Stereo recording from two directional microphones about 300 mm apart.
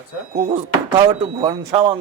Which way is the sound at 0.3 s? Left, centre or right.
Right.